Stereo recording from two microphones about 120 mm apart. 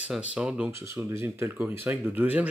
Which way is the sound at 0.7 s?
20° right (ahead or behind).